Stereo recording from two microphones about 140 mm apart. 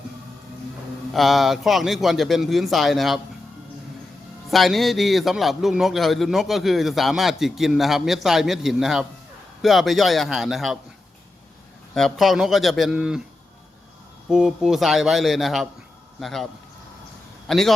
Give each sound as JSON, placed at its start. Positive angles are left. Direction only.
{"t": 1.1, "sound": "a man's voice", "side_deg": 0}
{"t": 4.5, "sound": "a man's voice", "side_deg": 0}
{"t": 11.9, "sound": "a man's voice", "side_deg": 0}
{"t": 14.3, "sound": "a man's voice", "side_deg": -5}
{"t": 17.5, "sound": "a man's voice", "side_deg": 0}